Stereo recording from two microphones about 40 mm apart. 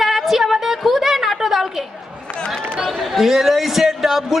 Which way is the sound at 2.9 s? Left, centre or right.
Centre.